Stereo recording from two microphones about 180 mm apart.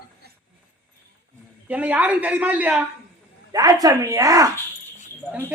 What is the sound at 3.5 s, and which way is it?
A man's voice, 20° right (ahead or behind).